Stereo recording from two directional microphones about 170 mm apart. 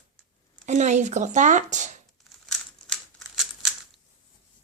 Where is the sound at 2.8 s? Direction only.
Centre (ahead or behind).